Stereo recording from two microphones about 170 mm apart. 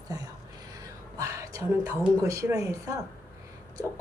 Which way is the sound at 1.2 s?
20° right (ahead or behind).